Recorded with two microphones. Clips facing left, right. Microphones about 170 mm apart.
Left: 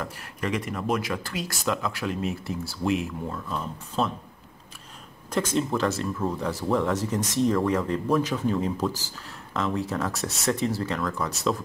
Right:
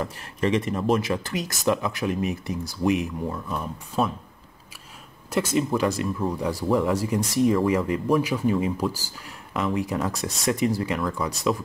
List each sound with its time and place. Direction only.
0.0 s speech: 25° right (ahead or behind)
5.3 s speech: 5° right (ahead or behind)